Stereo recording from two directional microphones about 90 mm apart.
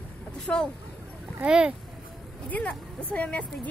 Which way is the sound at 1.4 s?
10° right (ahead or behind).